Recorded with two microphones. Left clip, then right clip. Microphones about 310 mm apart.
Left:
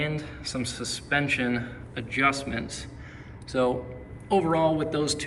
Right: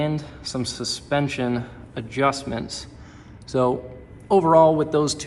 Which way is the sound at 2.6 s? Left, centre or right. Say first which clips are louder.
Right 4 dB; right.